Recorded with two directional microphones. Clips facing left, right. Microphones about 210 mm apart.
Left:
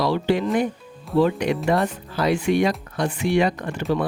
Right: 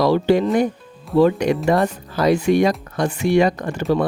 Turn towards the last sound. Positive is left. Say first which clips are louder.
# right 4 dB
turn(degrees=-40)  # may be behind; listen again after turning